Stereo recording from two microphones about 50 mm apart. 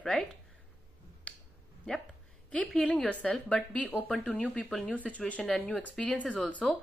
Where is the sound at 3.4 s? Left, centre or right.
Left.